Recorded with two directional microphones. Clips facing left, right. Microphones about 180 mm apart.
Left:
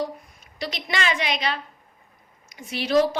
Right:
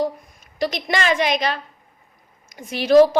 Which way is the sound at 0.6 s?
45° right (ahead or behind).